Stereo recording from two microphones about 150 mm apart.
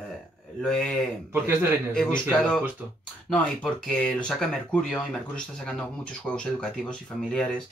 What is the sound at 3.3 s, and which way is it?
Speech, 5° left (ahead or behind).